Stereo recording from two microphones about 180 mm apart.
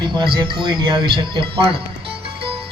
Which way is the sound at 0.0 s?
25° right (ahead or behind).